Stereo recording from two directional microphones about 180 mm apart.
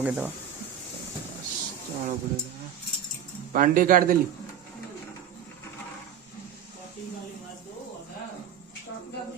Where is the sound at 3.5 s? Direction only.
50° right (ahead or behind).